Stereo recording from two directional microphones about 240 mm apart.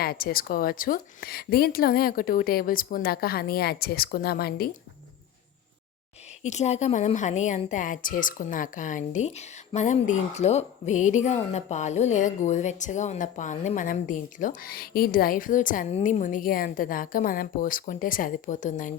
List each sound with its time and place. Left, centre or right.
0.0 s a woman's voice: left
6.4 s a woman's voice: left